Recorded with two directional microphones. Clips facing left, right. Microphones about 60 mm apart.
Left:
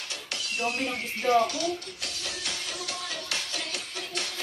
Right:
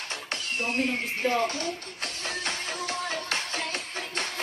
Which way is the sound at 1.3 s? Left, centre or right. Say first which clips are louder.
Left 8 dB; right.